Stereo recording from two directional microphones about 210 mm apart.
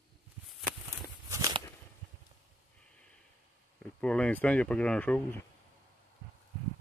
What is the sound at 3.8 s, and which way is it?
Speech, 5° left (ahead or behind).